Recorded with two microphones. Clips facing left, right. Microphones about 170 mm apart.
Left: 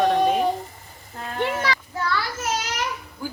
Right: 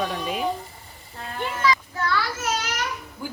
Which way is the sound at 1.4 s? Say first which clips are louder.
Even; 70° left (ahead or behind).